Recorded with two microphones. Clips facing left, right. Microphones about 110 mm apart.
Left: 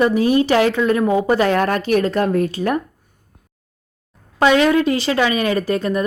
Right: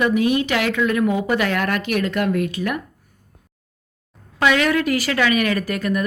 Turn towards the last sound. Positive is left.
turn(degrees=30)  # may be behind; listen again after turning